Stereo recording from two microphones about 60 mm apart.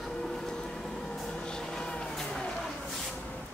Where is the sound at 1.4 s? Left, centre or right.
Centre.